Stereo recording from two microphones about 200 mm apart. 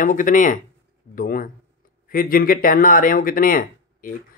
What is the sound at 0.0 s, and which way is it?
Speech, 40° left (ahead or behind).